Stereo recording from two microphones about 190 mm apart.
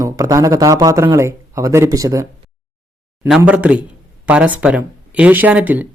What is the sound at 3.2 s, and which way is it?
Speech, 5° right (ahead or behind).